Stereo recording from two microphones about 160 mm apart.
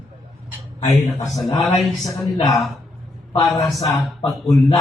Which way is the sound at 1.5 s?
20° left (ahead or behind).